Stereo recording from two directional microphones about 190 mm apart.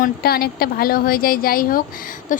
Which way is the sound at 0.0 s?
55° left (ahead or behind).